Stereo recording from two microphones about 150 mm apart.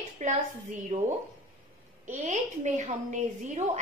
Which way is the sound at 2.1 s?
55° right (ahead or behind).